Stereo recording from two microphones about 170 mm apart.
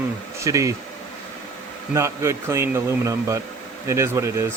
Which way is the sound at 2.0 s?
15° right (ahead or behind).